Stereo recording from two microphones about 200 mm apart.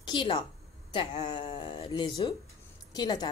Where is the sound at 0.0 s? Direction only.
25° left (ahead or behind).